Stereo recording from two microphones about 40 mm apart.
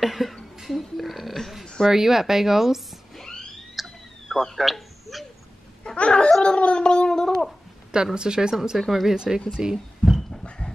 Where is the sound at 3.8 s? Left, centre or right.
Centre.